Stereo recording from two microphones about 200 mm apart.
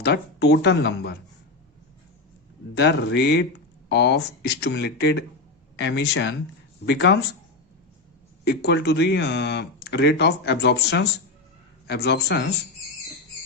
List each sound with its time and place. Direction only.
0.0 s speech: 55° left (ahead or behind)
2.7 s speech: 60° left (ahead or behind)
8.4 s speech: 55° left (ahead or behind)